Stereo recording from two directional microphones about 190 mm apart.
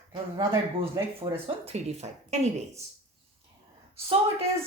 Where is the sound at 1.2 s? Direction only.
35° right (ahead or behind).